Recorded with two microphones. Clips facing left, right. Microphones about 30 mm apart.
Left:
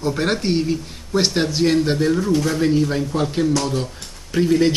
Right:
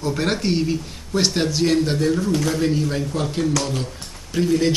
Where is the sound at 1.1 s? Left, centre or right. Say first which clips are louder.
Left 1 dB; centre.